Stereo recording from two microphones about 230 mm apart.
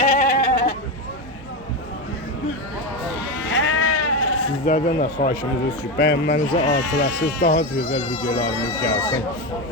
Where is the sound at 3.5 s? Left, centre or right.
Left.